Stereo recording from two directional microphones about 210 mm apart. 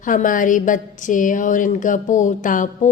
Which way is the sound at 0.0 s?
40° left (ahead or behind).